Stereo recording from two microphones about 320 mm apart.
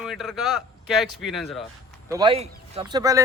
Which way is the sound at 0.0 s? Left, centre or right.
Centre.